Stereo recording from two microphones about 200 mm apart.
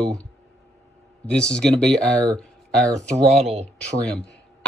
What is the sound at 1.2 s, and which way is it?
Speech, 5° left (ahead or behind).